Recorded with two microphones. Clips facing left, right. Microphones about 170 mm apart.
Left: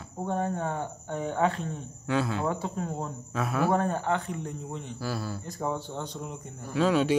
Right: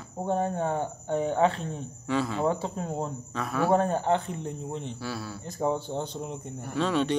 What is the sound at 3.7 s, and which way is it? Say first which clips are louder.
Speech: right 3 dB; 30° right (ahead or behind).